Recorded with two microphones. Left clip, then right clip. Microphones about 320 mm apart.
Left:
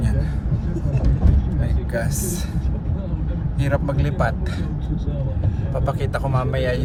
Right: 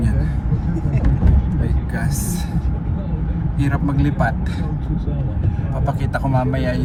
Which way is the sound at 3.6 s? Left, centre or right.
Centre.